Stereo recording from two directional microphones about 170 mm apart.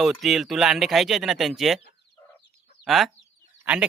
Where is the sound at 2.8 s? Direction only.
Centre (ahead or behind).